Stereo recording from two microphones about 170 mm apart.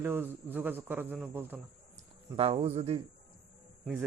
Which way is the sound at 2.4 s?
35° right (ahead or behind).